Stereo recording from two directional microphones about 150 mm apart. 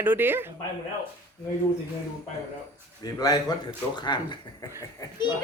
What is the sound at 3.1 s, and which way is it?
Speech, 25° left (ahead or behind).